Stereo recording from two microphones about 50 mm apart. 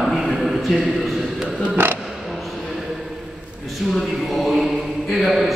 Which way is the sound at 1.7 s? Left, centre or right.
Right.